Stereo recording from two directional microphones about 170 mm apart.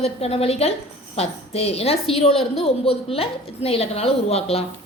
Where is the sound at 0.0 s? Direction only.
35° left (ahead or behind).